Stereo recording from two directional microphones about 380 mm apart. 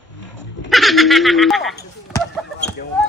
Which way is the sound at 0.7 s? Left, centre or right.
Centre.